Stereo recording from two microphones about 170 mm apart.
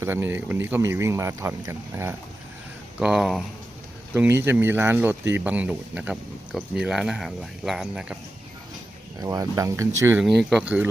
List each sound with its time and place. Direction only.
0.0 s speech: 15° right (ahead or behind)
3.0 s speech: centre (ahead or behind)
4.1 s speech: 10° right (ahead or behind)
9.2 s speech: 20° right (ahead or behind)
10.2 s speech: centre (ahead or behind)